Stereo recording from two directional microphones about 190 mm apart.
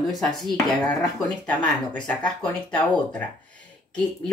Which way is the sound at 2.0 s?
5° left (ahead or behind).